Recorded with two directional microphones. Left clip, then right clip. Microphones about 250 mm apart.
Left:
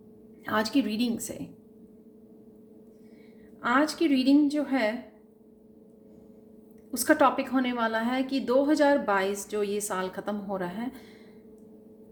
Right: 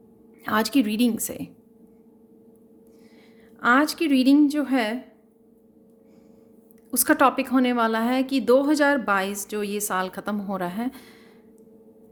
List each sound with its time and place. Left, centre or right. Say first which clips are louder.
0.4 s a woman's voice: right 4 dB; right
3.6 s a woman's voice: right 5 dB; right
6.9 s a woman's voice: right 3 dB; right